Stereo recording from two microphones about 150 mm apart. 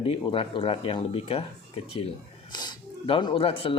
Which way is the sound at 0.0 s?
35° left (ahead or behind).